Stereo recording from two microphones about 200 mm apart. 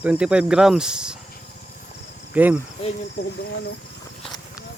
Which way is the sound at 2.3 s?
10° right (ahead or behind).